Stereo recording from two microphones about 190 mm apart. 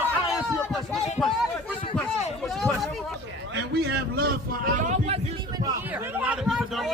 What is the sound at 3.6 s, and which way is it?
Speech, 60° right (ahead or behind).